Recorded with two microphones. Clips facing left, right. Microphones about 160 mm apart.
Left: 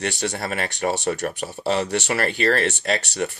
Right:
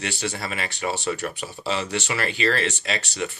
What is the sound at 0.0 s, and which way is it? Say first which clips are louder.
Speech: left 3 dB; 60° left (ahead or behind).